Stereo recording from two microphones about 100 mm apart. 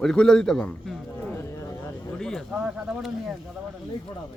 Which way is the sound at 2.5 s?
10° right (ahead or behind).